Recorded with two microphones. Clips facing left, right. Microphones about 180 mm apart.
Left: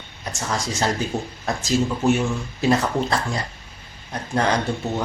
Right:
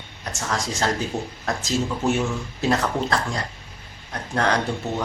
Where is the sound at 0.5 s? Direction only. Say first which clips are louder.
Left 1 dB; centre (ahead or behind).